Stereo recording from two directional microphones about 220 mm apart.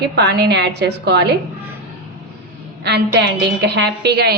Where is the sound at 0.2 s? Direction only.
50° right (ahead or behind).